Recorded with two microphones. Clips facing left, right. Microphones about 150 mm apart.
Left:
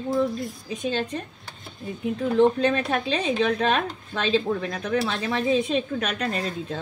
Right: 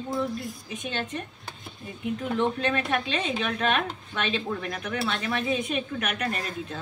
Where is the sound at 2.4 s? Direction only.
35° left (ahead or behind).